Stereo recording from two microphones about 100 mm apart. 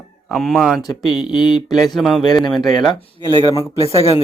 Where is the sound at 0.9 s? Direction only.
50° left (ahead or behind).